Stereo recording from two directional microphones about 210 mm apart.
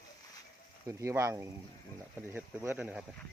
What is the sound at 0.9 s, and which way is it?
Speech, 15° right (ahead or behind).